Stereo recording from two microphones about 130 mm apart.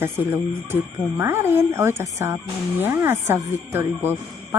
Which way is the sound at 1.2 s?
20° right (ahead or behind).